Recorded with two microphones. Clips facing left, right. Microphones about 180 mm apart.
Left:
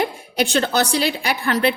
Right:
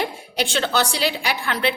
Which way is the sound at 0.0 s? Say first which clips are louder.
Left 4 dB; 45° left (ahead or behind).